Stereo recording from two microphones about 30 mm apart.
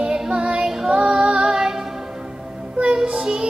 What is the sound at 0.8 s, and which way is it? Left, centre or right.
Female singing, right.